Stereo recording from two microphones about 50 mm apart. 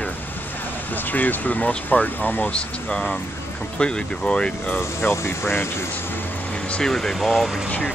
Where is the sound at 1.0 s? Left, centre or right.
Left.